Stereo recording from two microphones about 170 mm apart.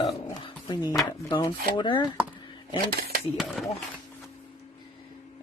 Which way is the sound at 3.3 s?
Centre (ahead or behind).